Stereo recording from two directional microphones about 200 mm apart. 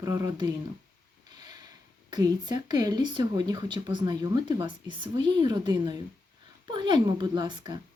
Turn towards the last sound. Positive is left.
turn(degrees=-20)  # may be behind; listen again after turning